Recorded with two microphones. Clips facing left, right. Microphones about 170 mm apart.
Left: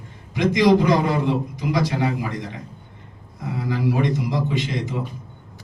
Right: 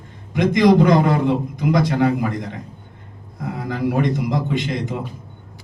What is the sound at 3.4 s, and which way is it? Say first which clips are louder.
A man's voice: right 1 dB; 55° right (ahead or behind).